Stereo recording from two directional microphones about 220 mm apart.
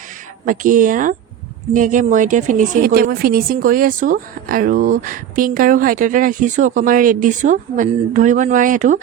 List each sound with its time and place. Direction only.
0.4 s speech: 35° right (ahead or behind)